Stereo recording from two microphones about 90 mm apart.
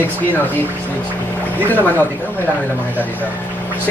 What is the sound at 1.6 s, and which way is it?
Speech, 20° left (ahead or behind).